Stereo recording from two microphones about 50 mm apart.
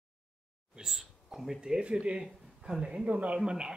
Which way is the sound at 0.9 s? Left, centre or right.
Centre.